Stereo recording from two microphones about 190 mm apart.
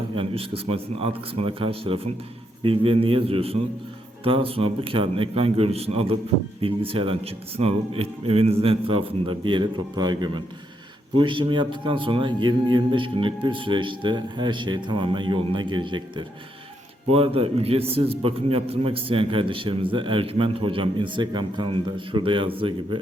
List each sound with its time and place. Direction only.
0.2 s a man's voice: 30° right (ahead or behind)